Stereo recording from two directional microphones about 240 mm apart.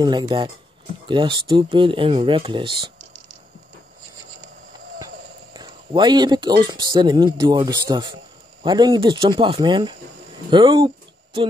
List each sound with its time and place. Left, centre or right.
0.0 s speech: centre
4.9 s speech: centre